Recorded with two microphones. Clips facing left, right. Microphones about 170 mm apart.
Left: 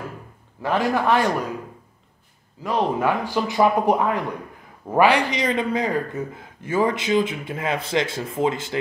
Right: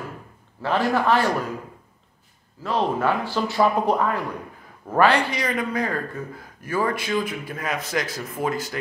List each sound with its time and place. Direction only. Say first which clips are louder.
0.6 s speech: even; 15° left (ahead or behind)
2.6 s a man's voice: left 1 dB; 15° left (ahead or behind)